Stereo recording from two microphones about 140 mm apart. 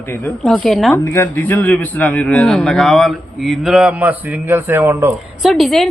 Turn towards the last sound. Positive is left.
turn(degrees=0)  # may be behind; listen again after turning